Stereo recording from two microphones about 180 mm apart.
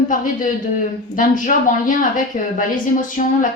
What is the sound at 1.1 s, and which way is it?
Speech, 45° left (ahead or behind).